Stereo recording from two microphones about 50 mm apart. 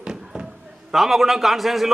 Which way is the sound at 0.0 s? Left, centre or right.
Centre.